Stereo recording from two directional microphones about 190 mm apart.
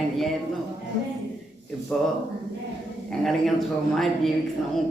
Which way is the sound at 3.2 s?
Centre (ahead or behind).